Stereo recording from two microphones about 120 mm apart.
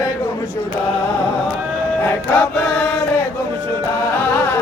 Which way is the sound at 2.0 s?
20° left (ahead or behind).